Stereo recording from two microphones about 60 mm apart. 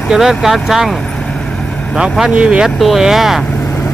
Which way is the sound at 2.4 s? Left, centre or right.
Centre.